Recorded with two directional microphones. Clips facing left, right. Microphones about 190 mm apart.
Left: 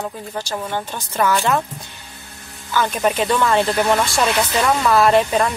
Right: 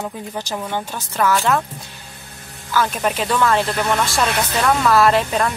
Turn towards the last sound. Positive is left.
turn(degrees=5)  # may be behind; listen again after turning